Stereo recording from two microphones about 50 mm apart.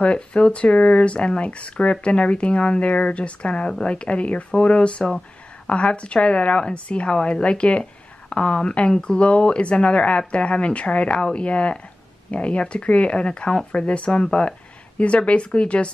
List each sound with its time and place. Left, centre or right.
0.0 s a woman's voice: left